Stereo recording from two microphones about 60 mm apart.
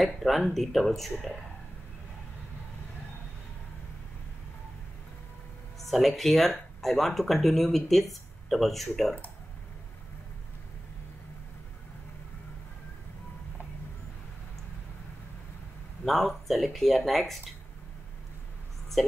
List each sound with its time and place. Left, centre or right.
0.0 s speech: centre
5.8 s speech: centre
16.1 s speech: centre
19.0 s speech: centre